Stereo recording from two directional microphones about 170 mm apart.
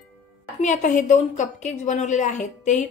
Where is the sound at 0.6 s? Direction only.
45° left (ahead or behind).